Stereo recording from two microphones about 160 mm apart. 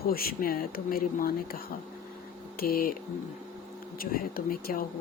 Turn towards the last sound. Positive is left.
turn(degrees=65)  # may be behind; listen again after turning